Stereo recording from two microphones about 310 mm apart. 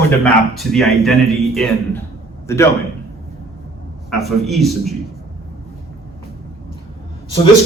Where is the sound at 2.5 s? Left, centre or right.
Centre.